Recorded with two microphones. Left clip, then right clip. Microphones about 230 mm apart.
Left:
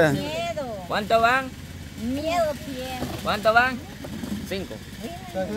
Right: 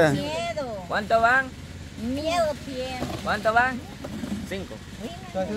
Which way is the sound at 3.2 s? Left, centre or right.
Left.